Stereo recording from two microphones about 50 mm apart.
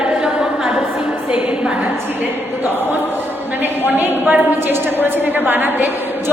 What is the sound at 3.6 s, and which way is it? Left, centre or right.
A woman's voice, right.